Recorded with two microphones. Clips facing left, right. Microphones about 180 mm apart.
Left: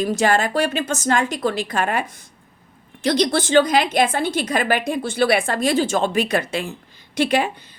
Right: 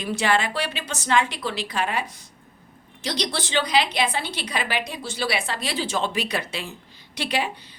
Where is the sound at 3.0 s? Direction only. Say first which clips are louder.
Left 9 dB; 50° left (ahead or behind).